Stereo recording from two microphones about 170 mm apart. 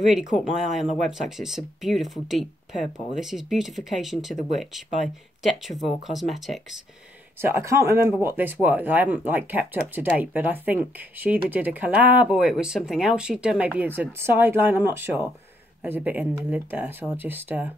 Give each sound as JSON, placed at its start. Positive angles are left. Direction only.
{"t": 0.0, "sound": "speech", "side_deg": -5}
{"t": 7.4, "sound": "speech", "side_deg": -15}